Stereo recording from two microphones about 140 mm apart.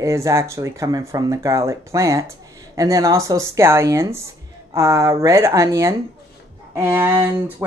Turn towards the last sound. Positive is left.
turn(degrees=-15)  # may be behind; listen again after turning